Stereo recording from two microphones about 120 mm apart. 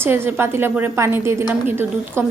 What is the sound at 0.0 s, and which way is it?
A woman's voice, 20° right (ahead or behind).